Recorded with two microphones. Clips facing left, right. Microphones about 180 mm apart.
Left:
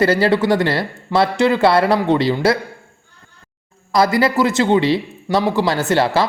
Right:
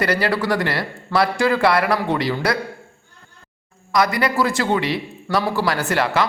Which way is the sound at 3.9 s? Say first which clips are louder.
Left 4 dB; 30° left (ahead or behind).